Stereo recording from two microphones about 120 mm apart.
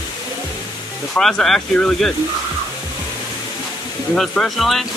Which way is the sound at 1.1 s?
5° left (ahead or behind).